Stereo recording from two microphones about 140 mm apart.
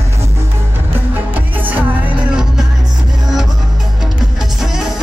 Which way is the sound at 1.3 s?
10° right (ahead or behind).